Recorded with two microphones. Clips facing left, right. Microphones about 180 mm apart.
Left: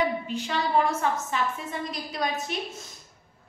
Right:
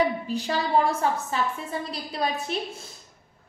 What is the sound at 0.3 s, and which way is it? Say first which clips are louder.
A woman's voice: right 2 dB; 35° right (ahead or behind).